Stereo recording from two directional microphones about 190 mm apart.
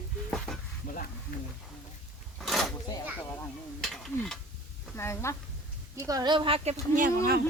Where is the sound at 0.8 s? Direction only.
45° left (ahead or behind).